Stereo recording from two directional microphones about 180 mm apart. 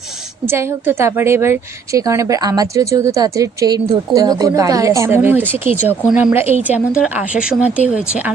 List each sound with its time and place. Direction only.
0.4 s a woman's voice: 15° right (ahead or behind)